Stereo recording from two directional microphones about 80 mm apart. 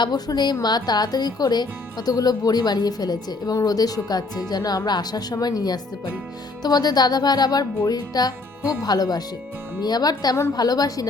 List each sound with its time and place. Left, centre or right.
0.0 s a woman's voice: left